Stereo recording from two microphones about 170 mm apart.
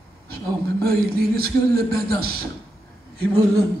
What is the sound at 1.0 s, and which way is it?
Speech, 65° right (ahead or behind).